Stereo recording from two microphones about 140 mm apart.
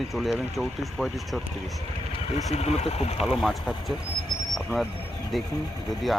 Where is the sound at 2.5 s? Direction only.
50° left (ahead or behind).